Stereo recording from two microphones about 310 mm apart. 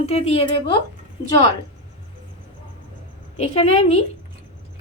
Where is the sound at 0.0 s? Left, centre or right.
Centre.